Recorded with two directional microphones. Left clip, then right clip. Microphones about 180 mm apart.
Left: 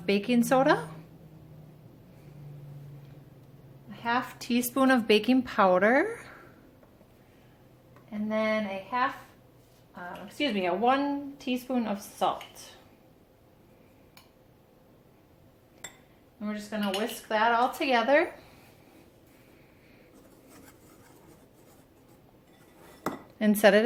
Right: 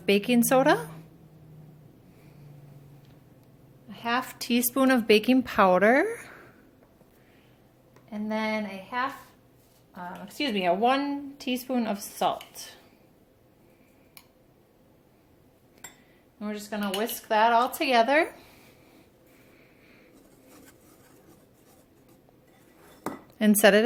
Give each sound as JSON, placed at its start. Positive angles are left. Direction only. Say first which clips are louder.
{"t": 0.0, "sound": "a woman's voice", "louder": "right 3 dB", "side_deg": -30}
{"t": 3.8, "sound": "speech", "louder": "right 1 dB", "side_deg": -55}
{"t": 8.1, "sound": "a sound", "louder": "left 1 dB", "side_deg": -55}
{"t": 9.9, "sound": "speech", "louder": "right 1 dB", "side_deg": -55}
{"t": 16.4, "sound": "speech", "louder": "right 1 dB", "side_deg": -55}
{"t": 23.4, "sound": "speech", "louder": "right 2 dB", "side_deg": -25}